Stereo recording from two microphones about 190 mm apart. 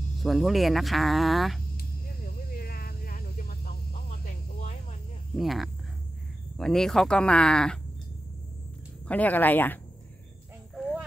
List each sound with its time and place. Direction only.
0.2 s speech: centre (ahead or behind)
1.8 s vehicle: 50° left (ahead or behind)
5.3 s speech: centre (ahead or behind)
9.0 s speech: 10° left (ahead or behind)
10.7 s a sound: centre (ahead or behind)